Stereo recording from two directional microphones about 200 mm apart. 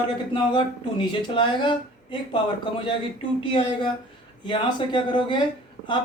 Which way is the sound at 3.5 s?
25° left (ahead or behind).